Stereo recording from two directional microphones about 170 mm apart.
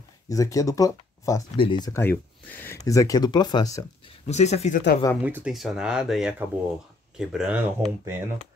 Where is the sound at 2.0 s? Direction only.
10° left (ahead or behind).